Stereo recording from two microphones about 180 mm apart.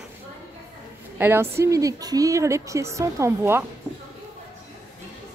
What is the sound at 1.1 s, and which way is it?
Speech, 10° right (ahead or behind).